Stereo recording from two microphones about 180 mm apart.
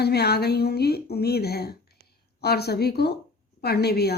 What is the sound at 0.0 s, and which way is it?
Speech, 65° left (ahead or behind).